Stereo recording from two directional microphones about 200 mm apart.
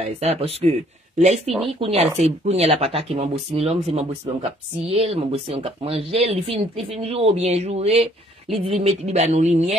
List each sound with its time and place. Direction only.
0.2 s speech: 30° right (ahead or behind)